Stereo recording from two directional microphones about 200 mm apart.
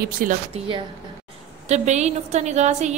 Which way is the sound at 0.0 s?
45° right (ahead or behind).